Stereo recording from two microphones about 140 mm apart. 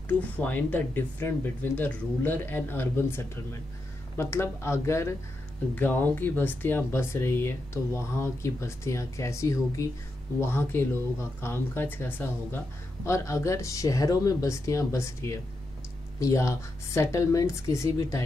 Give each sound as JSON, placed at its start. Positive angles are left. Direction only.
{"t": 0.4, "sound": "speech", "side_deg": 10}